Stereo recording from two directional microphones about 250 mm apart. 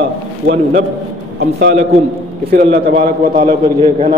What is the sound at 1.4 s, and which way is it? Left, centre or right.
A man's voice, right.